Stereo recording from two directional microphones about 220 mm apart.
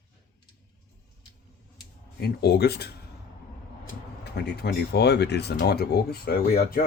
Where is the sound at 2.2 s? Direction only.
45° left (ahead or behind).